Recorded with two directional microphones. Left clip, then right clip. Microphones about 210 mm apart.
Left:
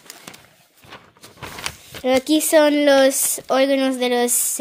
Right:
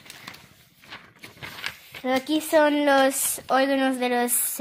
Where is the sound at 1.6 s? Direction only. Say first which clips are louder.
Left 6 dB; 45° left (ahead or behind).